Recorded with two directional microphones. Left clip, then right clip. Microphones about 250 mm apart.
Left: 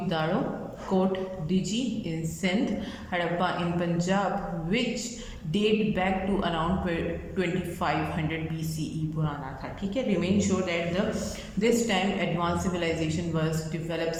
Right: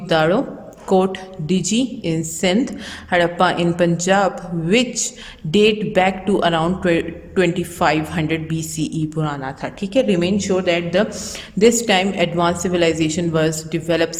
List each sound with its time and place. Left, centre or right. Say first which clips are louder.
0.1 s a man's voice: right 13 dB; right
5.5 s a man's voice: right 10 dB; right